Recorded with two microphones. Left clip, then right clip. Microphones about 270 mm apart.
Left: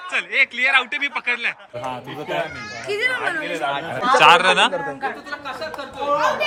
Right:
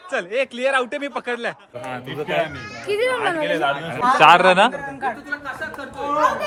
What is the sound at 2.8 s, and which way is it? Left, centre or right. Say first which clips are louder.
Speech: right 1 dB; centre.